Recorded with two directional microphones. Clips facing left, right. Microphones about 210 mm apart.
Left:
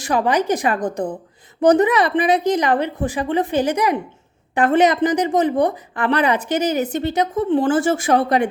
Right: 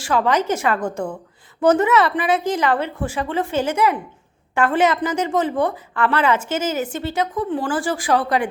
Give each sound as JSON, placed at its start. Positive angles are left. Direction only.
{"t": 0.0, "sound": "a woman's voice", "side_deg": 15}